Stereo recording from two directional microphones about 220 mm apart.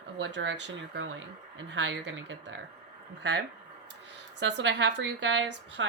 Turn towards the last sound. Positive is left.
turn(degrees=-55)  # may be behind; listen again after turning